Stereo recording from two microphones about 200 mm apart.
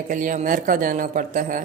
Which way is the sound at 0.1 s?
40° right (ahead or behind).